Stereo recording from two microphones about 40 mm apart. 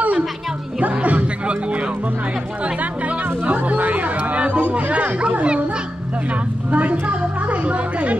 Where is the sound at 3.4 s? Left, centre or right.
Right.